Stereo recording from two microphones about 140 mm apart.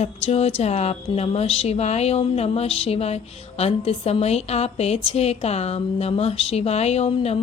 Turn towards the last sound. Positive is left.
turn(degrees=50)  # may be behind; listen again after turning